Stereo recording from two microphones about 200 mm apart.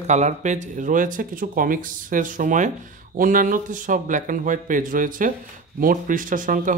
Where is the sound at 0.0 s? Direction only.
35° right (ahead or behind).